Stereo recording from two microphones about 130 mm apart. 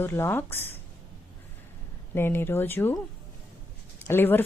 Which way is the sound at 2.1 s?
15° left (ahead or behind).